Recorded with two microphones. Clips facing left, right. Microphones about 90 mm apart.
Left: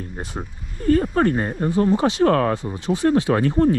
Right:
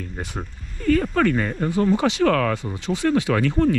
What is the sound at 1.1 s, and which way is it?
Speech, 30° left (ahead or behind).